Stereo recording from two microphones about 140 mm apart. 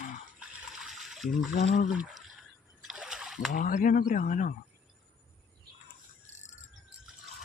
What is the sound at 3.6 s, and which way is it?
Speech, 75° left (ahead or behind).